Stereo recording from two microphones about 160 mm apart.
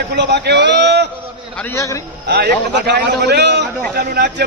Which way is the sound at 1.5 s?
15° left (ahead or behind).